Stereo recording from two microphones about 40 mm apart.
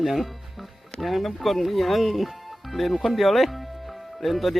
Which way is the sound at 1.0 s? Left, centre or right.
Centre.